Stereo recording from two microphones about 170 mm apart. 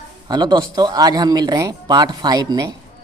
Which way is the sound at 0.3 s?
25° right (ahead or behind).